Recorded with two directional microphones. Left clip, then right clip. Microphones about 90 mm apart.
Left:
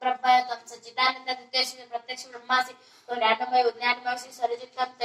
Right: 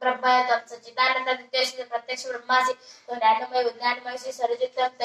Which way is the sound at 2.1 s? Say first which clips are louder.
Right 3 dB; 30° right (ahead or behind).